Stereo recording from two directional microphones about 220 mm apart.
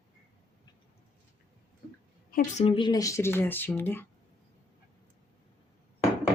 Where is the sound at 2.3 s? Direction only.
35° left (ahead or behind).